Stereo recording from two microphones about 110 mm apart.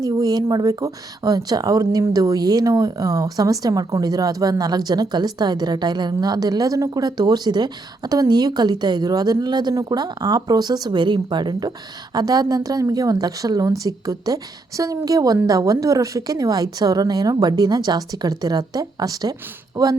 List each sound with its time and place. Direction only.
0.0 s speech: 35° right (ahead or behind)